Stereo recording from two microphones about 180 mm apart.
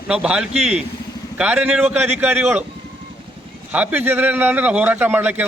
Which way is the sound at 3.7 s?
10° right (ahead or behind).